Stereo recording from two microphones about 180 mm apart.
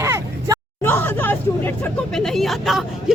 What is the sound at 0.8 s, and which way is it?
Speech, 10° left (ahead or behind).